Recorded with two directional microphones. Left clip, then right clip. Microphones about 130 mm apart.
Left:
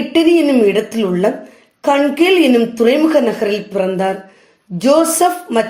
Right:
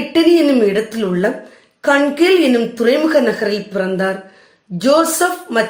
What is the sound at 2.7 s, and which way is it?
Speech, 15° left (ahead or behind).